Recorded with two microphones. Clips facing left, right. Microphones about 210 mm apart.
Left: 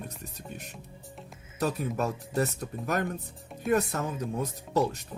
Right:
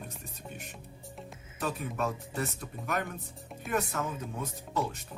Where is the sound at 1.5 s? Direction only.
40° left (ahead or behind).